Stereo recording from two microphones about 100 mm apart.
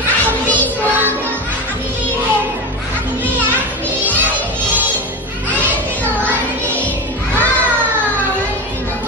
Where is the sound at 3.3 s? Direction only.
20° right (ahead or behind).